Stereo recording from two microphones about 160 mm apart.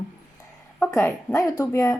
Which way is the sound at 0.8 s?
15° left (ahead or behind).